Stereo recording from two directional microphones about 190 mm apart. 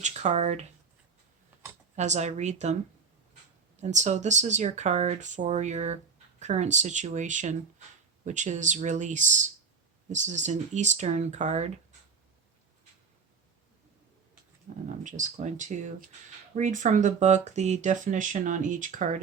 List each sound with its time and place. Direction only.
0.0 s speech: 35° right (ahead or behind)
2.0 s speech: 35° right (ahead or behind)
3.8 s speech: 40° right (ahead or behind)
14.8 s speech: 40° right (ahead or behind)